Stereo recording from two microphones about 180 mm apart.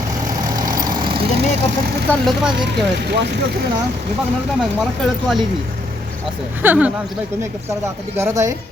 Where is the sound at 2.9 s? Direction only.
65° right (ahead or behind).